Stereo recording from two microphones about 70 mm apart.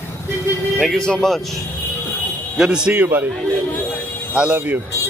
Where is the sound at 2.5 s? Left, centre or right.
Centre.